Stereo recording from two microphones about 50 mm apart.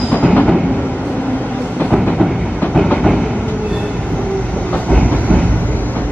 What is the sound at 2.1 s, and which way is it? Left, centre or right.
Train, centre.